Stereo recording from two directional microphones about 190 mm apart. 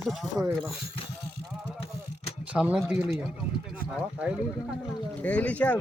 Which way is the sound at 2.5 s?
5° right (ahead or behind).